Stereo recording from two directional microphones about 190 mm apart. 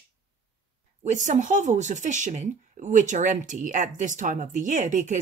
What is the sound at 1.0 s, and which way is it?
Speech, 40° right (ahead or behind).